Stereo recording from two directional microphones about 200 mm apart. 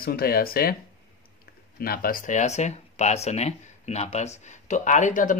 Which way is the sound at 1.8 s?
45° left (ahead or behind).